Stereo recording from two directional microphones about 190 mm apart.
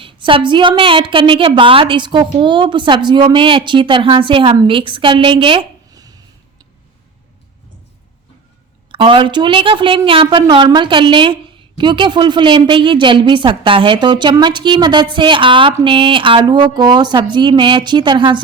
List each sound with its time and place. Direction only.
0.0 s a woman's voice: 25° right (ahead or behind)
8.9 s a woman's voice: 25° right (ahead or behind)